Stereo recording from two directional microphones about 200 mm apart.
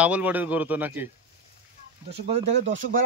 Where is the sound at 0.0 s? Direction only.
5° right (ahead or behind).